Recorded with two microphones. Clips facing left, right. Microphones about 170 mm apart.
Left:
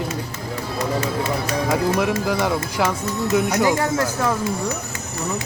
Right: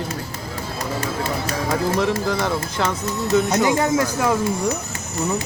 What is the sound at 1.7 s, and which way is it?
Speech, 10° left (ahead or behind).